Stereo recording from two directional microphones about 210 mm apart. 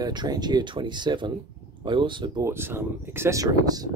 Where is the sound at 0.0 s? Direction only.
20° right (ahead or behind).